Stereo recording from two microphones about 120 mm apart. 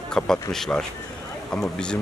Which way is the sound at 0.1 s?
5° left (ahead or behind).